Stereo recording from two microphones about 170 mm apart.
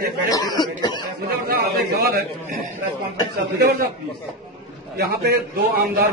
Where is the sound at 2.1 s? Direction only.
65° right (ahead or behind).